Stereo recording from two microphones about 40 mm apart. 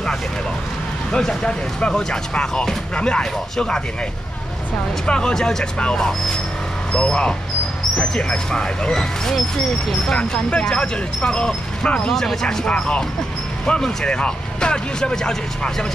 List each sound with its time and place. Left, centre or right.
1.1 s speech: centre
5.0 s speech: left; by 9.9 s centre
10.0 s speech: centre
12.1 s speech: centre
12.6 s speech: left